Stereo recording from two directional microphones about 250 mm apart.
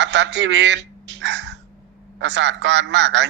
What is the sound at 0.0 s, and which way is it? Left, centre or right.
A man's voice, right.